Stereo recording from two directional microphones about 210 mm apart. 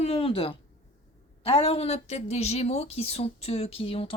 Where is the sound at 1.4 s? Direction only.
30° left (ahead or behind).